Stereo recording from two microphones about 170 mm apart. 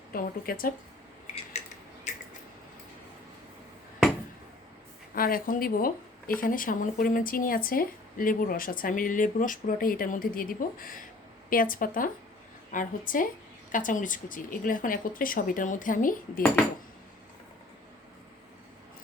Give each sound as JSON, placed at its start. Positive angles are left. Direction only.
{"t": 0.1, "sound": "speech", "side_deg": 60}
{"t": 5.1, "sound": "speech", "side_deg": 60}